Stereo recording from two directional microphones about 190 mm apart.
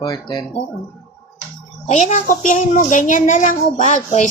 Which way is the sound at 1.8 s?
40° left (ahead or behind).